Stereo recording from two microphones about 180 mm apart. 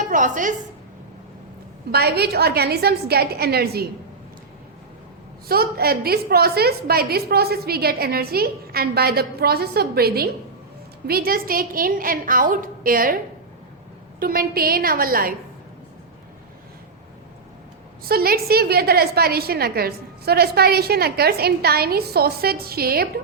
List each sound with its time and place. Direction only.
0.1 s a woman's voice: 45° right (ahead or behind)
1.9 s a woman's voice: 60° right (ahead or behind)
5.5 s a woman's voice: 60° right (ahead or behind)
14.2 s a woman's voice: 55° right (ahead or behind)
18.0 s a woman's voice: 55° right (ahead or behind)